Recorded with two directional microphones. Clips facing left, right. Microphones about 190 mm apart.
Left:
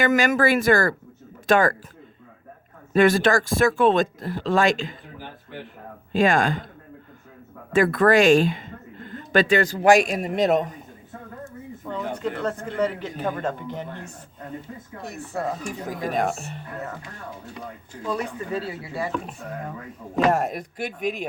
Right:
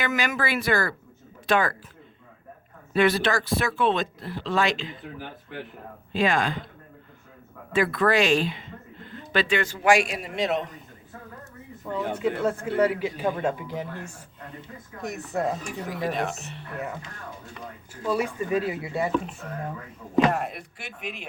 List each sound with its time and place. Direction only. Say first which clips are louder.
0.0 s speech: left 7 dB; 45° left (ahead or behind)
2.9 s speech: left 4 dB; 45° left (ahead or behind)
6.1 s speech: left 4 dB; 45° left (ahead or behind)
7.7 s speech: left 5 dB; 45° left (ahead or behind)
11.9 s speech: right 2 dB; 5° right (ahead or behind)
15.0 s speech: right 2 dB; 20° right (ahead or behind)
15.9 s speech: left 3 dB; 45° left (ahead or behind)
18.0 s speech: right 2 dB; 10° right (ahead or behind)
20.3 s speech: left 5 dB; 45° left (ahead or behind)